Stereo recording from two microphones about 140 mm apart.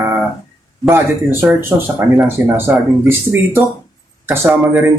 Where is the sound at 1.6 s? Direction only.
15° right (ahead or behind).